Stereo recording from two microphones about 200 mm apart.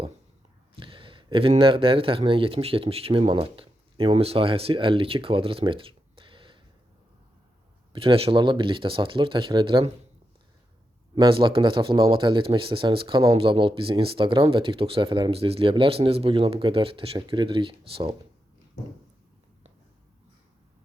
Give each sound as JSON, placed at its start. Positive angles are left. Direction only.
{"t": 0.8, "sound": "speech", "side_deg": -25}
{"t": 7.9, "sound": "speech", "side_deg": -30}
{"t": 11.1, "sound": "speech", "side_deg": -25}